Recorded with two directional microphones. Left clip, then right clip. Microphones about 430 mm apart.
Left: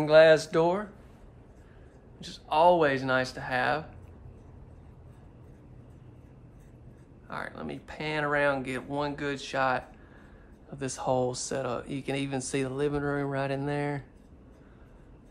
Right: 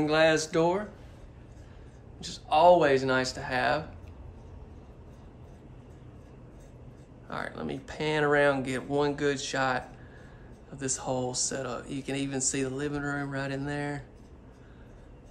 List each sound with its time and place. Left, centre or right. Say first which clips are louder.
0.0 s speech: left 5 dB; centre
2.1 s speech: right 1 dB; centre
7.2 s speech: right 2 dB; centre